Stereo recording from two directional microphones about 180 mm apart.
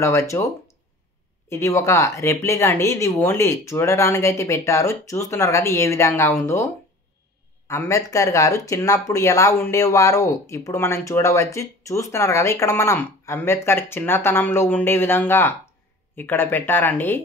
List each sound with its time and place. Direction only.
0.0 s speech: 15° left (ahead or behind)
1.5 s speech: 15° left (ahead or behind)